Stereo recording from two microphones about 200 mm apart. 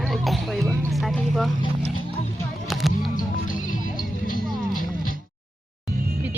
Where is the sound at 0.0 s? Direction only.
Centre (ahead or behind).